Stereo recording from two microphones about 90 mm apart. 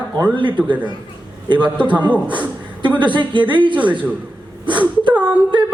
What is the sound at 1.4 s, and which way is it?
Singing, 60° right (ahead or behind).